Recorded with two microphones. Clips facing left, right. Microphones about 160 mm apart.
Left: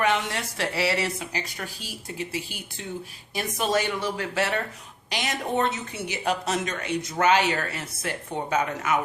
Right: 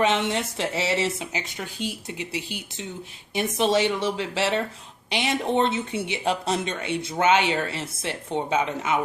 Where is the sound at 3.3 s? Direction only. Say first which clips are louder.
Right 4 dB; 25° right (ahead or behind).